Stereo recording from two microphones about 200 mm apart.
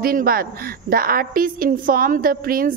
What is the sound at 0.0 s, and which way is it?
A woman's voice, 45° right (ahead or behind).